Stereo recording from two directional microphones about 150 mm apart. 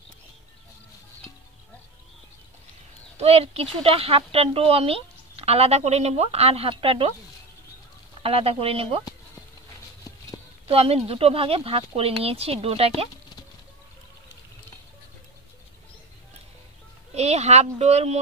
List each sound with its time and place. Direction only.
3.2 s speech: 45° right (ahead or behind)
8.2 s speech: 40° right (ahead or behind)
10.7 s speech: 40° right (ahead or behind)
17.1 s speech: 45° right (ahead or behind)